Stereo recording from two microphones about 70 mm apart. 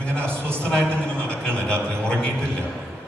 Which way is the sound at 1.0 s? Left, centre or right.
Centre.